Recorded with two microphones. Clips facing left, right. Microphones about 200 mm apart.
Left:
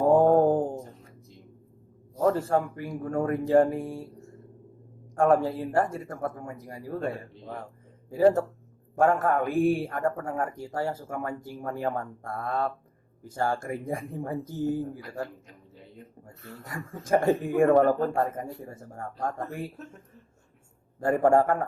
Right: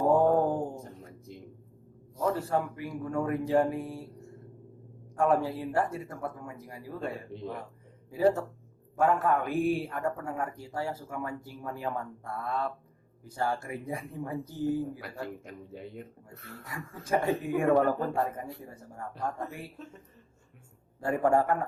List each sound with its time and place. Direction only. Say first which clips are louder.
2.1 s speech: left 5 dB; 50° left (ahead or behind)
5.1 s speech: left 4 dB; 50° left (ahead or behind)
8.1 s speech: left 5 dB; 45° left (ahead or behind)
15.0 s a man's voice: left 2 dB; 65° right (ahead or behind)
16.6 s speech: left 4 dB; 45° left (ahead or behind)
21.0 s speech: left 4 dB; 50° left (ahead or behind)